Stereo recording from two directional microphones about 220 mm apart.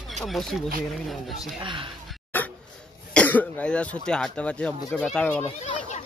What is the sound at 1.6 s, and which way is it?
Speech, 20° right (ahead or behind).